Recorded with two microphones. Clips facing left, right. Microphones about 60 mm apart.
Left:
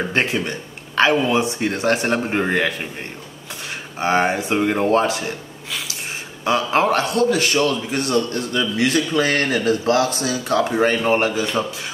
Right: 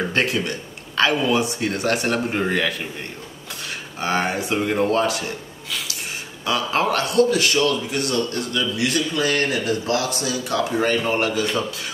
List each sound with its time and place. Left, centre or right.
0.1 s speech: left
4.0 s a man's voice: left